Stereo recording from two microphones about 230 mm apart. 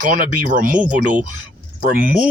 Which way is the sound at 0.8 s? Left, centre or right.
Centre.